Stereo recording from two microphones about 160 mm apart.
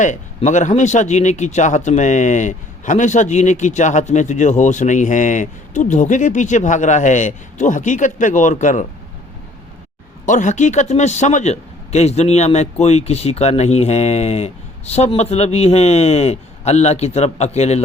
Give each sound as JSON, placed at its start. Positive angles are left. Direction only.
{"t": 0.0, "sound": "a man's voice", "side_deg": 50}
{"t": 10.2, "sound": "a man's voice", "side_deg": 50}